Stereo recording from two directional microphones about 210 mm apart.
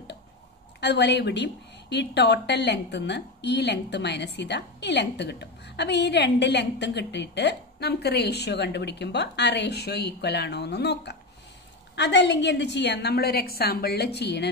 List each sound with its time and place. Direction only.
0.7 s a woman's voice: 55° left (ahead or behind)